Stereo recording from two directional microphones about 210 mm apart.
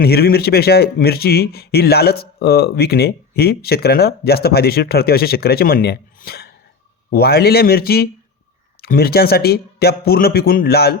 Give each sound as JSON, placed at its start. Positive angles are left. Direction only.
{"t": 0.0, "sound": "speech", "side_deg": 50}